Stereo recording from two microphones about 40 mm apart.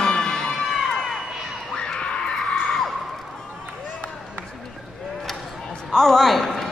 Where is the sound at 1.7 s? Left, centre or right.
Left.